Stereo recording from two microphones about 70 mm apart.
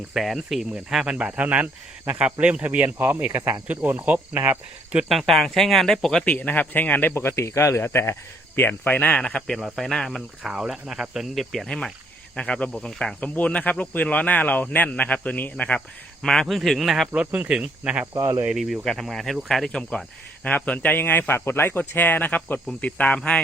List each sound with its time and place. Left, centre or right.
0.1 s speech: centre
1.2 s speech: right
5.0 s speech: centre
6.2 s speech: left; by 10.2 s centre
10.4 s speech: centre
12.4 s speech: centre
16.2 s speech: centre
17.2 s speech: centre
18.0 s speech: right
18.5 s speech: centre
20.4 s speech: left